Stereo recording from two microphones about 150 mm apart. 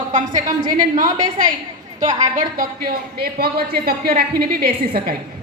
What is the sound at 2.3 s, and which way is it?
A woman's voice, 75° right (ahead or behind).